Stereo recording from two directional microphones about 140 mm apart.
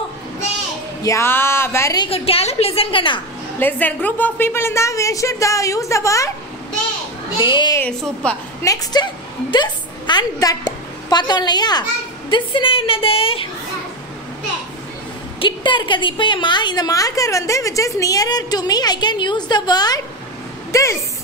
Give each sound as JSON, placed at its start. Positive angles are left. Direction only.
{"t": 1.0, "sound": "speech", "side_deg": 20}
{"t": 2.0, "sound": "a woman's voice", "side_deg": 45}
{"t": 3.5, "sound": "a woman's voice", "side_deg": 15}
{"t": 7.3, "sound": "a woman's voice", "side_deg": 35}
{"t": 7.8, "sound": "speech", "side_deg": 10}
{"t": 8.6, "sound": "a woman's voice", "side_deg": 30}
{"t": 15.3, "sound": "a woman's voice", "side_deg": 35}